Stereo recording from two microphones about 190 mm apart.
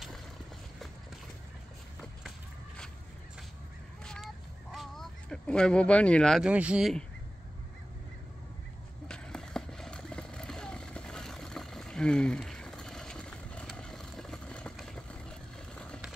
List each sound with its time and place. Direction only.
4.0 s fowl: 5° left (ahead or behind)
4.7 s speech: centre (ahead or behind)
9.0 s skateboard: 5° left (ahead or behind)